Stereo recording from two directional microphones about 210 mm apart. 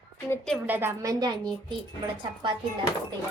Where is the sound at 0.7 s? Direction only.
10° right (ahead or behind).